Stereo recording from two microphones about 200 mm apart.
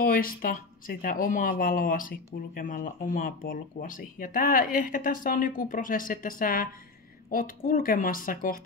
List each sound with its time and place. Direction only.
0.0 s speech: 45° left (ahead or behind)